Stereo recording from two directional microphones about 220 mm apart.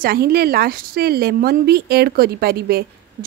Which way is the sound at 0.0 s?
45° right (ahead or behind).